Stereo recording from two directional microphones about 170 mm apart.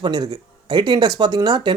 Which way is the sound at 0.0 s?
25° right (ahead or behind).